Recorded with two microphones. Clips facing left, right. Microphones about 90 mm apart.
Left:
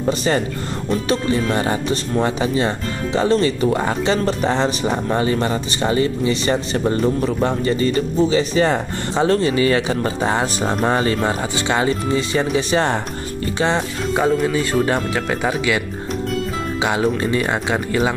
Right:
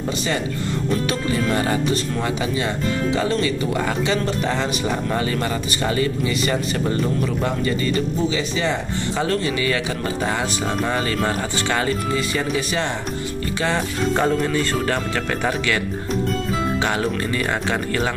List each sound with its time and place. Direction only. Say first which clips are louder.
1.0 s speech: left 3 dB; 30° left (ahead or behind)
11.2 s speech: left 2 dB; 20° left (ahead or behind)
14.1 s speech: left 3 dB; 5° left (ahead or behind)
17.4 s speech: left 2 dB; 15° left (ahead or behind)